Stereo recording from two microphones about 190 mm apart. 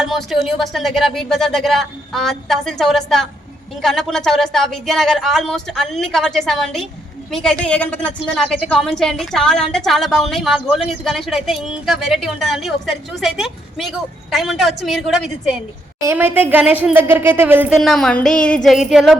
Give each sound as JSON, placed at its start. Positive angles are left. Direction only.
{"t": 0.0, "sound": "a woman's voice", "side_deg": 0}
{"t": 17.7, "sound": "a woman's voice", "side_deg": 0}